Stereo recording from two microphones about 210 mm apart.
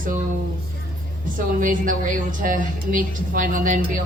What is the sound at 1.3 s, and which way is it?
A woman's voice, 40° right (ahead or behind).